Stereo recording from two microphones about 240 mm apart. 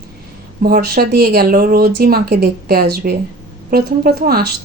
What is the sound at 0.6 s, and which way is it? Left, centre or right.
Speech, right.